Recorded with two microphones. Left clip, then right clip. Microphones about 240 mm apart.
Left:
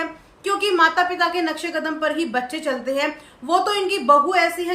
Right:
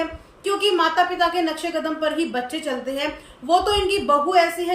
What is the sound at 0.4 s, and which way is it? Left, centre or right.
A woman's voice, centre.